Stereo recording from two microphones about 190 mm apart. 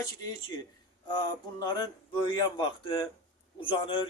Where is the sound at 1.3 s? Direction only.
20° left (ahead or behind).